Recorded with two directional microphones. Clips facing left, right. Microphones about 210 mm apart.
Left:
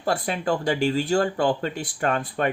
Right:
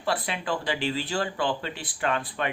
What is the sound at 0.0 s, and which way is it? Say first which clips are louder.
Speech: left 4 dB; 45° left (ahead or behind).